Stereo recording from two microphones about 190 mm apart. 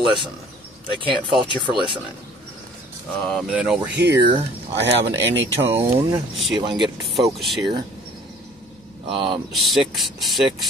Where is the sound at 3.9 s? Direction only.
60° right (ahead or behind).